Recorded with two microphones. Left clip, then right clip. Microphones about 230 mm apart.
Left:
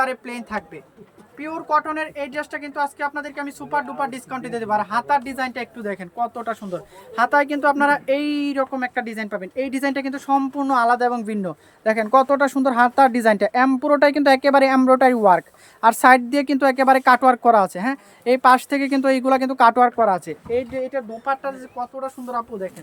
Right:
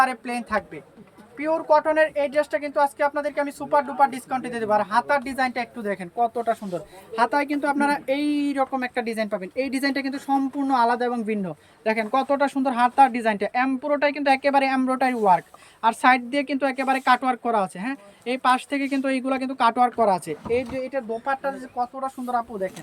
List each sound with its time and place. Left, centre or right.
0.0 s speech: centre